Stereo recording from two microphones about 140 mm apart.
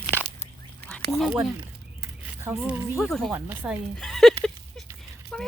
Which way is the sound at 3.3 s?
10° right (ahead or behind).